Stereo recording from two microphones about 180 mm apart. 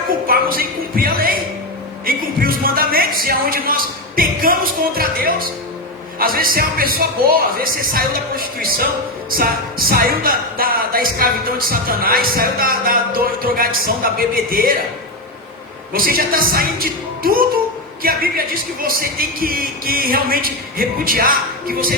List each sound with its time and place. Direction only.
0.3 s speech: 55° right (ahead or behind)
15.9 s speech: 55° right (ahead or behind)